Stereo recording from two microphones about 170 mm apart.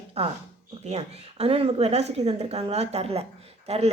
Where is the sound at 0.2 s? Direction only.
35° right (ahead or behind).